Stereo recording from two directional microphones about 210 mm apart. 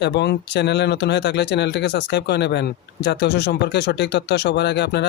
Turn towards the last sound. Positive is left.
turn(degrees=55)  # may be behind; listen again after turning